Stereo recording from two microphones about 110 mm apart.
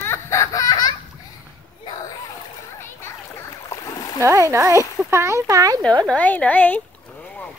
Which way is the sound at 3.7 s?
25° left (ahead or behind).